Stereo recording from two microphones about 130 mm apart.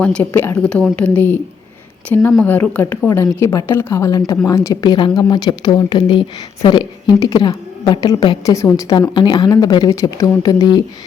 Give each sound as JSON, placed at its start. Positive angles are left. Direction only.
{"t": 0.0, "sound": "a woman's voice", "side_deg": 10}
{"t": 8.4, "sound": "a woman's voice", "side_deg": 25}